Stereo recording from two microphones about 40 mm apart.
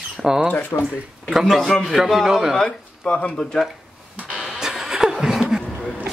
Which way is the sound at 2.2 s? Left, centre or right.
Centre.